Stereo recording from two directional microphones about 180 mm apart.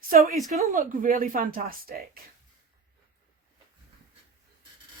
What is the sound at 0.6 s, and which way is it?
Speech, 45° right (ahead or behind).